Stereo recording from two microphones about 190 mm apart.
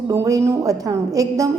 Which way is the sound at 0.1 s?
15° right (ahead or behind).